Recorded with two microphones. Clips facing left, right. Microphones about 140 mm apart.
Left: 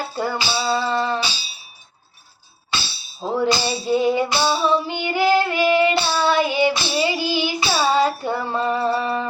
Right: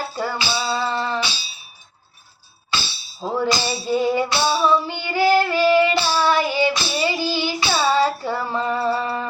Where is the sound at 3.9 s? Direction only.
20° left (ahead or behind).